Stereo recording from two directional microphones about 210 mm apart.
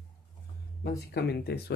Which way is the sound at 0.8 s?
50° left (ahead or behind).